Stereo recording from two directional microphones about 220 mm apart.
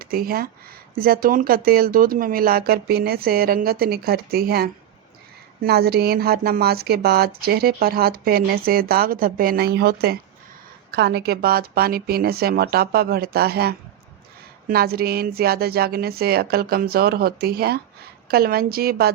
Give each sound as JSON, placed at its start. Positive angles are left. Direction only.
{"t": 0.0, "sound": "speech", "side_deg": -40}